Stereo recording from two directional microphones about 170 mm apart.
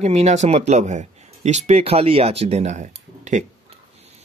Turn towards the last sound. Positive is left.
turn(degrees=-45)  # may be behind; listen again after turning